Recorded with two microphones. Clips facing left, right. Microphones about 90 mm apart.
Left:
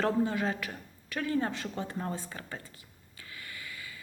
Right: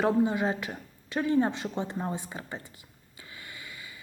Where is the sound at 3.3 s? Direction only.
20° right (ahead or behind).